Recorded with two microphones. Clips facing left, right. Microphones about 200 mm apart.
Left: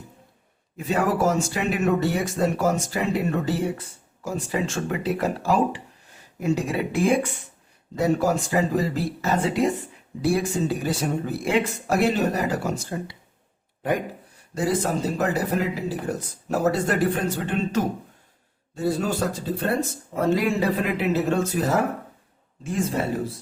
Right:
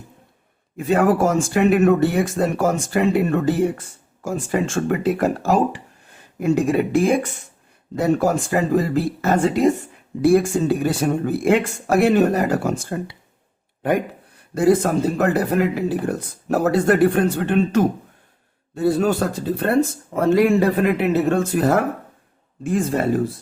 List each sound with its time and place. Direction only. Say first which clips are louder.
0.9 s speech: right 5 dB; 55° right (ahead or behind)
14.5 s speech: right 7 dB; 55° right (ahead or behind)
20.3 s speech: right 8 dB; 55° right (ahead or behind)